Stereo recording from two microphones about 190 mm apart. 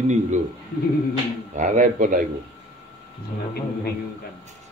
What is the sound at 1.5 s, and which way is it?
Speech, 45° right (ahead or behind).